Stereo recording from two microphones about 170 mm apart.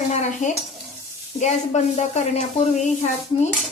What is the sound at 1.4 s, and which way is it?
Speech, 40° left (ahead or behind).